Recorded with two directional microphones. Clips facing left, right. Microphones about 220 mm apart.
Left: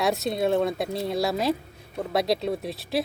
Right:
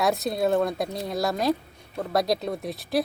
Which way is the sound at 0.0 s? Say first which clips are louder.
Even; centre (ahead or behind).